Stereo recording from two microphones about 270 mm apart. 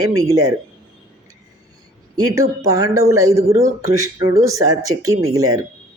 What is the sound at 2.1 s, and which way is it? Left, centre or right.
Speech, centre.